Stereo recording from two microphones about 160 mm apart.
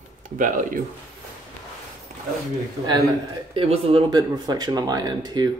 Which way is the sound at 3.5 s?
35° right (ahead or behind).